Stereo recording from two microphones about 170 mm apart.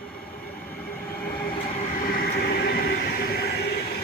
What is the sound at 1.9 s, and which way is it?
Train, 60° left (ahead or behind).